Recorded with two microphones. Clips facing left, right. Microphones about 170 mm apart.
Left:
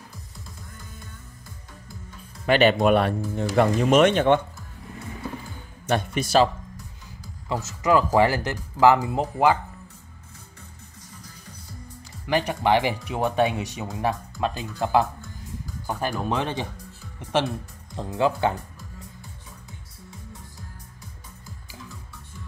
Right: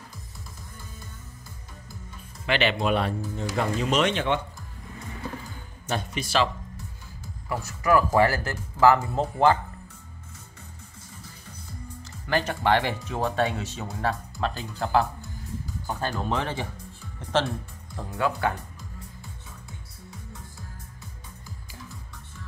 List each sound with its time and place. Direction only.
2.4 s speech: 45° left (ahead or behind)
5.9 s speech: 60° left (ahead or behind)
6.2 s speech: 40° left (ahead or behind)
7.4 s speech: 20° left (ahead or behind)
12.3 s speech: 15° left (ahead or behind)
17.2 s music: 10° left (ahead or behind)
17.9 s speech: 20° left (ahead or behind)